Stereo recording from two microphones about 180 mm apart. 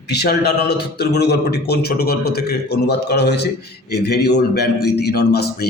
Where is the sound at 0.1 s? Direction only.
65° left (ahead or behind).